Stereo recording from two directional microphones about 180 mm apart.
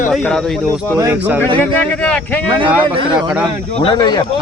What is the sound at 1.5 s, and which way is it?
Speech, 10° left (ahead or behind).